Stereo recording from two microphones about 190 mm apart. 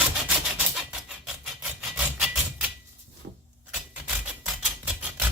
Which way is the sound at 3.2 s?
65° right (ahead or behind).